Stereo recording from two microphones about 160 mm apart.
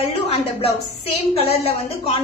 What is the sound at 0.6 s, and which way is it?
A woman's voice, 40° left (ahead or behind).